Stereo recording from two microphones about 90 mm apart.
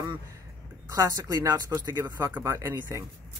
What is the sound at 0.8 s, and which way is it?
A woman's voice, 40° right (ahead or behind).